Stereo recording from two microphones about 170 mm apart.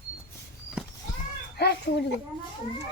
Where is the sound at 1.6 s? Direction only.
75° left (ahead or behind).